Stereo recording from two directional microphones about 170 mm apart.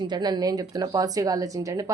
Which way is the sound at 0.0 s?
25° right (ahead or behind).